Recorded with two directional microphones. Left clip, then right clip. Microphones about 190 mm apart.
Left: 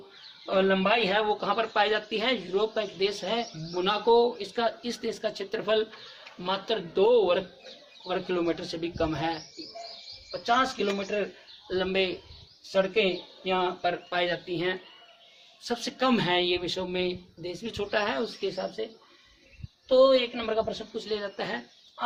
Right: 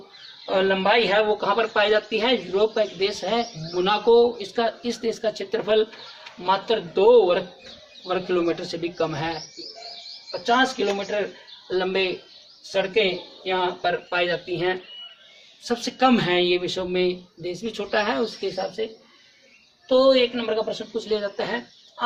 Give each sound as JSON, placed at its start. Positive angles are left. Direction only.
{"t": 0.4, "sound": "speech", "side_deg": 15}
{"t": 10.4, "sound": "speech", "side_deg": 15}
{"t": 11.7, "sound": "speech", "side_deg": 20}
{"t": 20.0, "sound": "speech", "side_deg": 15}